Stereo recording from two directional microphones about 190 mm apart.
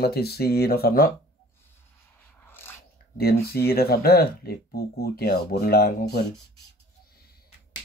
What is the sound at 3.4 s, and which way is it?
Speech, 55° left (ahead or behind).